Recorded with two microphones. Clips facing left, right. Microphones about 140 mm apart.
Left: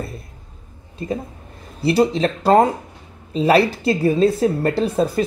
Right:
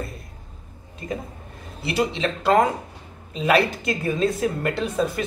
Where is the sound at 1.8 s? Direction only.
35° left (ahead or behind).